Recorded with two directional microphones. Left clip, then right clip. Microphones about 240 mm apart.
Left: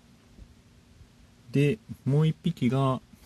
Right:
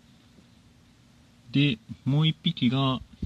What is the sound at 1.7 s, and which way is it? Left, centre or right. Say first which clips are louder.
Speech: left 1 dB; centre.